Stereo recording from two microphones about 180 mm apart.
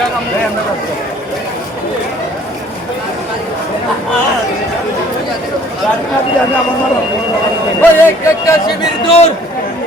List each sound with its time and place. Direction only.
7.8 s speech: 10° left (ahead or behind)
8.6 s speech: 35° left (ahead or behind)